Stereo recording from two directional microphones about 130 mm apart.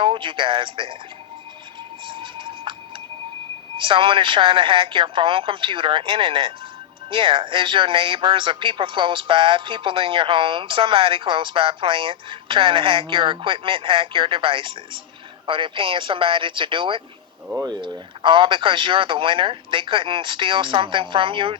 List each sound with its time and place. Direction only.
0.0 s speech: 40° right (ahead or behind)
2.0 s music: 40° right (ahead or behind)
3.8 s speech: 40° right (ahead or behind)